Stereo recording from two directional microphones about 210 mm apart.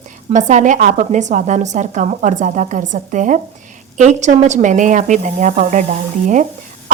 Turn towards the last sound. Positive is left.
turn(degrees=-35)  # may be behind; listen again after turning